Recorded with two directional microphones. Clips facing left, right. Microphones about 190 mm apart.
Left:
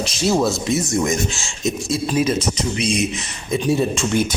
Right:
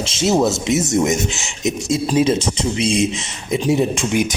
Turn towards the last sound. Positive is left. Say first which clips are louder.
# right 1 dB
turn(degrees=-15)  # may be behind; listen again after turning